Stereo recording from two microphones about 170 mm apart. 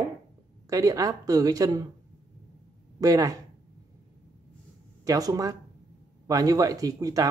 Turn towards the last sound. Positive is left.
turn(degrees=-20)  # may be behind; listen again after turning